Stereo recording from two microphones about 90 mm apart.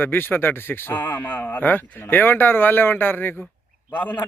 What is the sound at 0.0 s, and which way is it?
A man's voice, 25° left (ahead or behind).